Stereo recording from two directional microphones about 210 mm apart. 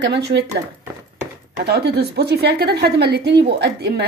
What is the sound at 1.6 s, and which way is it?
A woman's voice, 50° right (ahead or behind).